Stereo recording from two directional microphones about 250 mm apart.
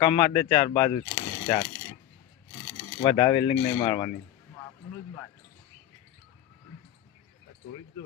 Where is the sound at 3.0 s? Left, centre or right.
Centre.